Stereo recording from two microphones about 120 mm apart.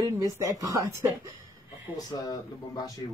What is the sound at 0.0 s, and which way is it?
Speech, 30° right (ahead or behind).